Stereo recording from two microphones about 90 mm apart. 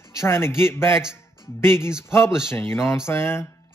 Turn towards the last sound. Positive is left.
turn(degrees=30)  # may be behind; listen again after turning